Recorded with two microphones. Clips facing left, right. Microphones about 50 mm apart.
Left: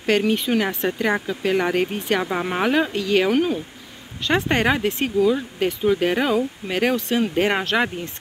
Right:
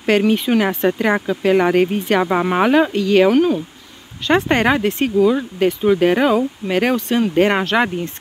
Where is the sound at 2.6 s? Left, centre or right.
Right.